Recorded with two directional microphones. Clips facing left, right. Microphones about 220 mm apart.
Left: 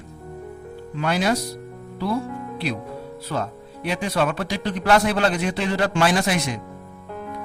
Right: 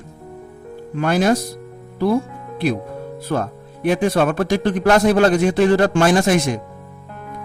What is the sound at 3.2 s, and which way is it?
A man's voice, 50° right (ahead or behind).